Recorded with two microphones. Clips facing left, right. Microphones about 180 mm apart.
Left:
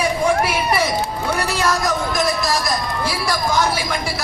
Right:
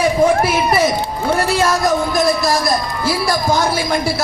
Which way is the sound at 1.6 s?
40° right (ahead or behind).